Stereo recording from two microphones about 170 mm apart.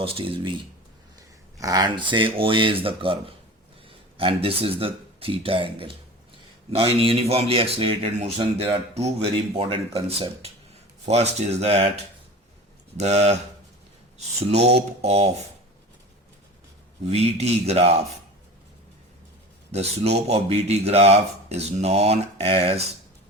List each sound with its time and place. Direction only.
0.0 s speech: 35° right (ahead or behind)
1.5 s speech: 20° right (ahead or behind); by 8.4 s 35° right (ahead or behind)
9.6 s speech: 35° right (ahead or behind)
13.0 s speech: 40° right (ahead or behind)
14.4 s speech: 40° right (ahead or behind)
17.1 s speech: 40° right (ahead or behind)
19.7 s speech: 40° right (ahead or behind)